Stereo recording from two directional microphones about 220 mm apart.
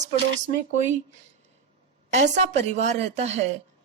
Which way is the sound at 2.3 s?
30° right (ahead or behind).